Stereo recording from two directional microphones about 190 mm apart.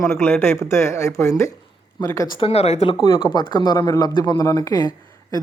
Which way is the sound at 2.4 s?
35° left (ahead or behind).